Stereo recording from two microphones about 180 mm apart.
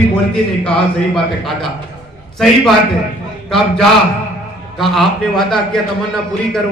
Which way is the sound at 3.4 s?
Centre (ahead or behind).